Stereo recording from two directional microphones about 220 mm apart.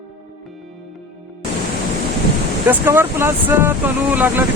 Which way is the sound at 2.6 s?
10° right (ahead or behind).